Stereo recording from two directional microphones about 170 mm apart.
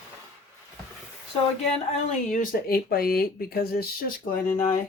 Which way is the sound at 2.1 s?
55° left (ahead or behind).